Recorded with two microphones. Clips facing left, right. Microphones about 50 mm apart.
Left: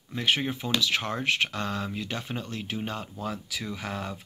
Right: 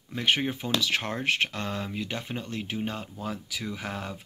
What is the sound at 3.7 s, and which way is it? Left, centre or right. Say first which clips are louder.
Speech: left 1 dB; right.